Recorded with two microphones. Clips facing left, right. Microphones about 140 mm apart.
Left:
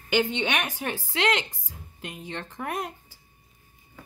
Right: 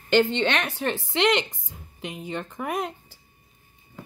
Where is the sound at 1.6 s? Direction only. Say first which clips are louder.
Right 4 dB; centre (ahead or behind).